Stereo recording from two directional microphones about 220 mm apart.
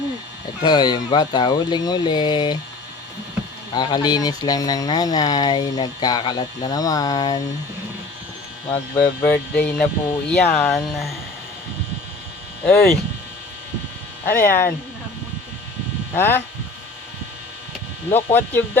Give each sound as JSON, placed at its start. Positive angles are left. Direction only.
{"t": 0.6, "sound": "speech", "side_deg": 20}
{"t": 3.8, "sound": "speech", "side_deg": 20}
{"t": 9.0, "sound": "speech", "side_deg": 5}
{"t": 12.6, "sound": "speech", "side_deg": 5}
{"t": 14.3, "sound": "speech", "side_deg": 10}
{"t": 16.1, "sound": "speech", "side_deg": 10}
{"t": 18.3, "sound": "speech", "side_deg": 10}